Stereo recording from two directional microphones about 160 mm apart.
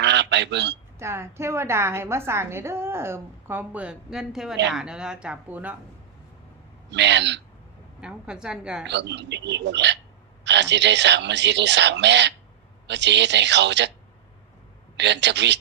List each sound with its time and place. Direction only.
0.0 s a man's voice: 90° right
0.9 s a woman's voice: 15° right (ahead or behind)
6.9 s speech: 90° right
8.0 s speech: 5° right (ahead or behind)
8.9 s speech: 90° right
14.9 s speech: 90° right